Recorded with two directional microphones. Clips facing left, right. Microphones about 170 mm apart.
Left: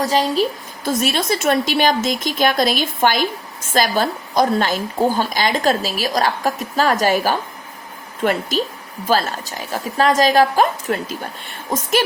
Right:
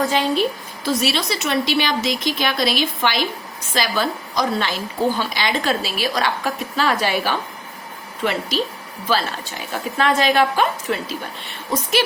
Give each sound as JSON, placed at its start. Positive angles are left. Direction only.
{"t": 0.0, "sound": "a woman's voice", "side_deg": 40}
{"t": 0.9, "sound": "a woman's voice", "side_deg": 50}